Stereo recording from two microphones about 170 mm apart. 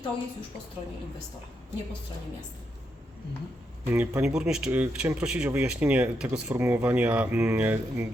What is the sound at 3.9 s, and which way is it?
Speech, 10° right (ahead or behind).